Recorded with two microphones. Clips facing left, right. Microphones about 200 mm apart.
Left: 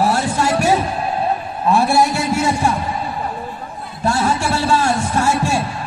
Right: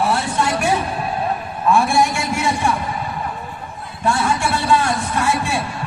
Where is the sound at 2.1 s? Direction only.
40° left (ahead or behind).